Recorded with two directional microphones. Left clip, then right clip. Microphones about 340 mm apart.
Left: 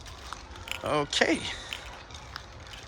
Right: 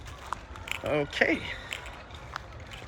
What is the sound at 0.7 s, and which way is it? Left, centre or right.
Speech, centre.